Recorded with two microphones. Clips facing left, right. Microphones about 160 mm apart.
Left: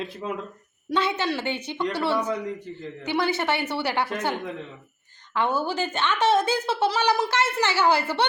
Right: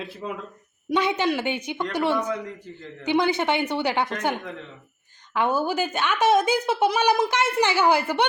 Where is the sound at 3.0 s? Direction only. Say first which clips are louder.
Right 3 dB; 20° right (ahead or behind).